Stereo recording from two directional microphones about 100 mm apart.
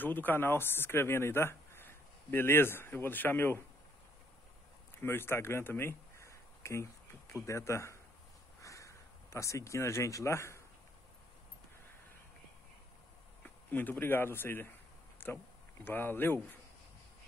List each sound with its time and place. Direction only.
0.0 s speech: 20° left (ahead or behind)
5.0 s speech: 25° left (ahead or behind)
8.5 s a sound: 30° left (ahead or behind)
13.7 s speech: 20° left (ahead or behind)